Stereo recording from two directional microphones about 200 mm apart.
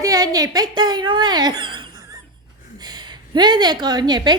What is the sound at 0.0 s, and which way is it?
A child's voice, 20° right (ahead or behind).